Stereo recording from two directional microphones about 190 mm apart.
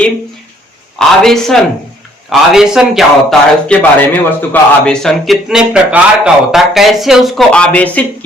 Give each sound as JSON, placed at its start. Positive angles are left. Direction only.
{"t": 0.9, "sound": "a man's voice", "side_deg": 0}